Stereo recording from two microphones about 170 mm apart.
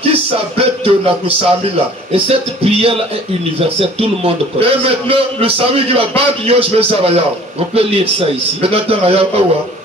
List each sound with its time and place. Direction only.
0.0 s music: 35° right (ahead or behind)
2.1 s a man's voice: 35° right (ahead or behind)
4.2 s a man's voice: 35° right (ahead or behind)